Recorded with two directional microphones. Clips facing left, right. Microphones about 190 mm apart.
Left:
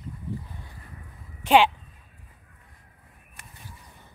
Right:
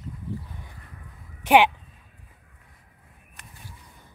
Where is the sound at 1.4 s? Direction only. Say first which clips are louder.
Right 1 dB; 15° right (ahead or behind).